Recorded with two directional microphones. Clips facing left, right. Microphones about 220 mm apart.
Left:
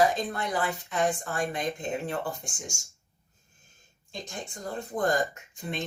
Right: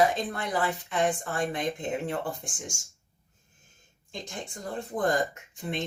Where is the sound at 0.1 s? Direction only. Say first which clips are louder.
Even; 30° right (ahead or behind).